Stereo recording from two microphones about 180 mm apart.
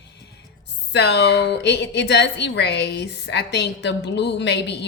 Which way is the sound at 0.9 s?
70° left (ahead or behind).